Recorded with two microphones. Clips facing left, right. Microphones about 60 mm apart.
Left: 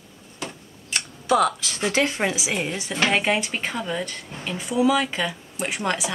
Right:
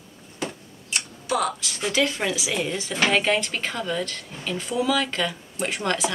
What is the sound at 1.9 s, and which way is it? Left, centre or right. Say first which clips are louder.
Speech: even; left.